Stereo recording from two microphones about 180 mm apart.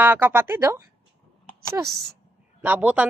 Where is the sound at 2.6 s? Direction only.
10° right (ahead or behind).